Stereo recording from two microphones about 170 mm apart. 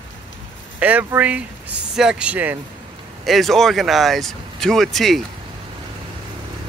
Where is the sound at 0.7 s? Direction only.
10° right (ahead or behind).